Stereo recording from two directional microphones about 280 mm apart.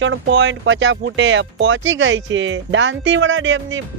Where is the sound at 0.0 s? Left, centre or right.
Right.